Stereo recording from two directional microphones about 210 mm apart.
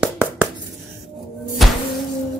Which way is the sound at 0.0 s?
10° right (ahead or behind).